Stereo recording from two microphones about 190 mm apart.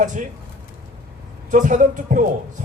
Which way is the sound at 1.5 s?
40° right (ahead or behind).